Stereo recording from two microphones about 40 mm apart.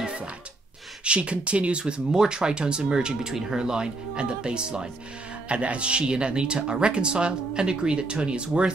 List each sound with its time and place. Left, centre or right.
0.0 s music: right
1.0 s speech: right